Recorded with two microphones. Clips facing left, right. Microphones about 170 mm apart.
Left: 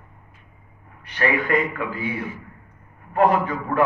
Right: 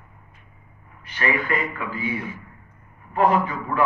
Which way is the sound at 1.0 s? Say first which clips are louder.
Left 2 dB; 55° left (ahead or behind).